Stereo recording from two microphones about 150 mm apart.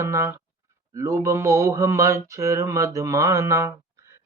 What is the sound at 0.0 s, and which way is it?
Mantra, 20° right (ahead or behind).